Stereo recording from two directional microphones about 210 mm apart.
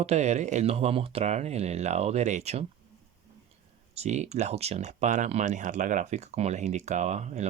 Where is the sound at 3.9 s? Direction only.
35° right (ahead or behind).